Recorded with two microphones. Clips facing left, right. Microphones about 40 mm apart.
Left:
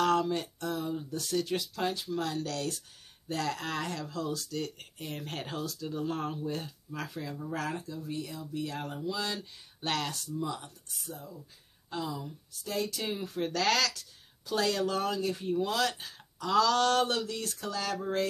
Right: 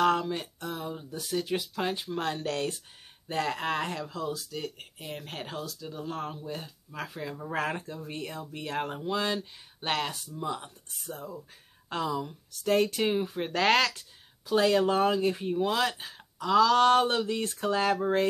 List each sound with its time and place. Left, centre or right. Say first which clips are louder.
0.0 s speech: right 1 dB; centre
7.2 s speech: right 5 dB; right
11.1 s speech: right 5 dB; right
11.9 s speech: right 5 dB; right
12.6 s speech: right 8 dB; right
13.2 s speech: right 3 dB; right